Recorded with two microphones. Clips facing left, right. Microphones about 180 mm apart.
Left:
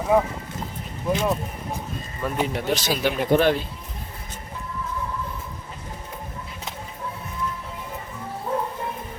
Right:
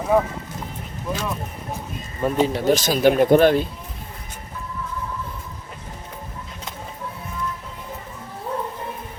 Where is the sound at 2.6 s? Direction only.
45° right (ahead or behind).